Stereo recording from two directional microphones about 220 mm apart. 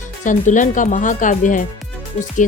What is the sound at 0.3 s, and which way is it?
Speech, 35° left (ahead or behind).